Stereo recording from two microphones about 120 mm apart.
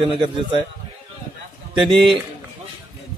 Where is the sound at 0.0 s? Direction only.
45° right (ahead or behind).